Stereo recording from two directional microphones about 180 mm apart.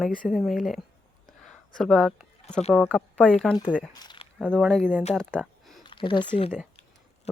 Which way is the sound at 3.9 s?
25° left (ahead or behind).